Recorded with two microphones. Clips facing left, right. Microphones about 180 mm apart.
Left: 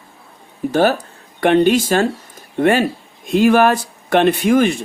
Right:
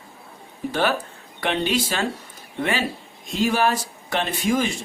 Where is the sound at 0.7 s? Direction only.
45° left (ahead or behind); by 4.7 s 60° left (ahead or behind).